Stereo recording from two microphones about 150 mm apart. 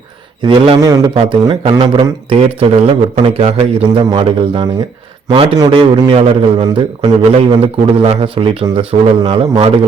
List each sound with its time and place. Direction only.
0.4 s a man's voice: 40° right (ahead or behind)
0.8 s a man's voice: 25° right (ahead or behind)